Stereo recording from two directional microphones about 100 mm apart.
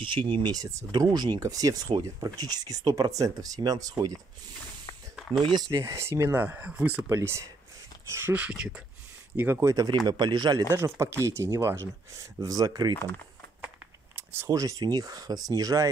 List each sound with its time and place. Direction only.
0.0 s speech: 55° right (ahead or behind)
0.5 s speech: 35° right (ahead or behind)
1.0 s speech: 45° right (ahead or behind)
5.4 s speech: 45° right (ahead or behind); by 7.1 s 10° right (ahead or behind)
7.1 s speech: 30° right (ahead or behind); by 8.8 s 10° right (ahead or behind)
9.4 s speech: 25° right (ahead or behind)
10.0 s speech: 50° right (ahead or behind)
10.7 s speech: 30° right (ahead or behind)
12.4 s speech: 40° right (ahead or behind)
14.1 s a sound: 25° right (ahead or behind)
14.6 s speech: 35° right (ahead or behind)